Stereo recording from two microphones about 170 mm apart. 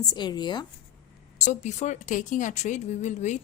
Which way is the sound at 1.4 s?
45° left (ahead or behind).